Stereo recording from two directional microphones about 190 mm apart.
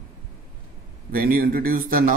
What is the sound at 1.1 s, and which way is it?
A man's voice, 50° right (ahead or behind).